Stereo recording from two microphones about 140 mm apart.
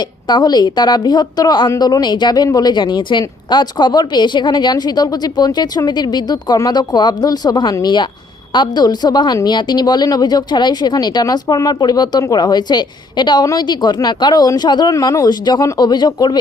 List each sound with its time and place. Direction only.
0.0 s a woman's voice: 30° left (ahead or behind)